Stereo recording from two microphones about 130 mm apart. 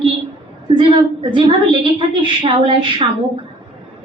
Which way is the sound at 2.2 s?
40° right (ahead or behind).